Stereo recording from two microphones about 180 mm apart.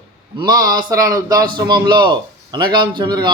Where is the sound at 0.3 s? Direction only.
20° right (ahead or behind).